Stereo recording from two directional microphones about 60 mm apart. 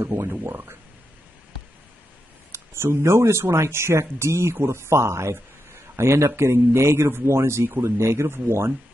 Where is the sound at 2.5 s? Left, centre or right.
Right.